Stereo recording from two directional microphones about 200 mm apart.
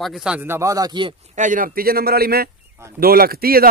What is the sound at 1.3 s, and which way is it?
A man's voice, 40° right (ahead or behind).